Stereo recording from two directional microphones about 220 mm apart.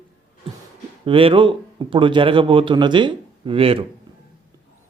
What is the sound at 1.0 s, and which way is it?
A man's voice, 25° right (ahead or behind).